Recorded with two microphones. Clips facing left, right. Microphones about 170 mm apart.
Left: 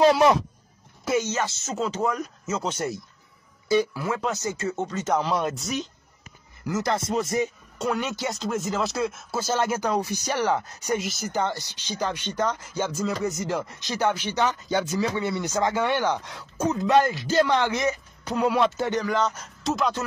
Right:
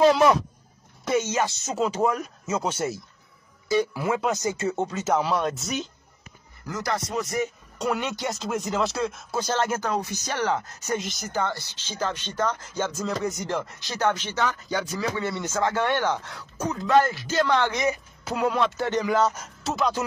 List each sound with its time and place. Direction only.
1.3 s speech: 15° right (ahead or behind)
3.9 s speech: 15° right (ahead or behind)
4.8 s speech: 10° right (ahead or behind)
6.7 s speech: 25° left (ahead or behind)
7.8 s speech: centre (ahead or behind)
11.3 s speech: 15° left (ahead or behind)
17.8 s a woman's voice: 5° right (ahead or behind)